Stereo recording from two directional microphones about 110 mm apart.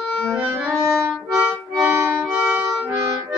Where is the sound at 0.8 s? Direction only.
25° right (ahead or behind).